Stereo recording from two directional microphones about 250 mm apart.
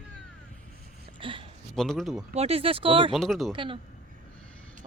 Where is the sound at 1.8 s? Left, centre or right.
Centre.